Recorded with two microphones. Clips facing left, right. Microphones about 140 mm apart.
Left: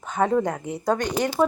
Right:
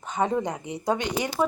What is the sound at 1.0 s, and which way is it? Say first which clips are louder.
Speech: left 4 dB; 45° left (ahead or behind).